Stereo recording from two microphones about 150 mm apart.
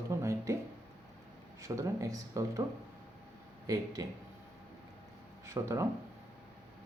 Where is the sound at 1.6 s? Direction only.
20° right (ahead or behind).